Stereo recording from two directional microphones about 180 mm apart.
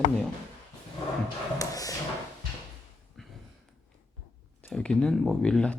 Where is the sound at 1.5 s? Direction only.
20° left (ahead or behind).